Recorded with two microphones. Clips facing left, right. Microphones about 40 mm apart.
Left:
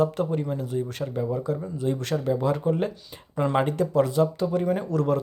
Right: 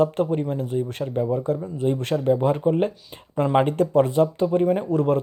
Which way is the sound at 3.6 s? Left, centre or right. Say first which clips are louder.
Right 4 dB; right.